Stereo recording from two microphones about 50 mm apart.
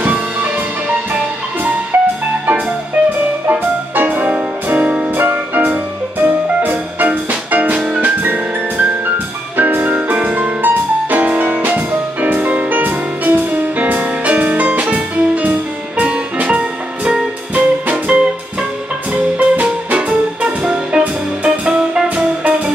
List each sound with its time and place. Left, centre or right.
0.0 s music: right
3.4 s music: right
9.6 s music: right
10.1 s music: right